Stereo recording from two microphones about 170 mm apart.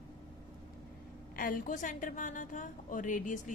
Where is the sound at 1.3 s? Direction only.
55° left (ahead or behind).